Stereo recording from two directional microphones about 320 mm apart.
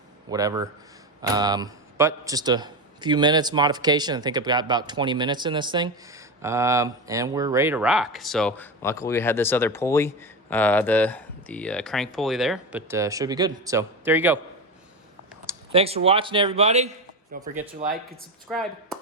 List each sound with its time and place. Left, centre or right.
0.3 s a man's voice: centre
15.4 s speech: centre
18.4 s speech: centre